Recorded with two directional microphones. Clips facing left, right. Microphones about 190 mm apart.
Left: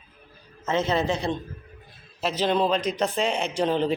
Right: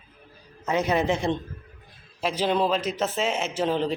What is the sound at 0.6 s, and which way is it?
A man's voice, 15° right (ahead or behind).